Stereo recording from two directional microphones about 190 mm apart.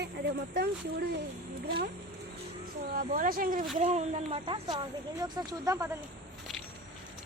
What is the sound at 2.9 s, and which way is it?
Speech, 45° right (ahead or behind).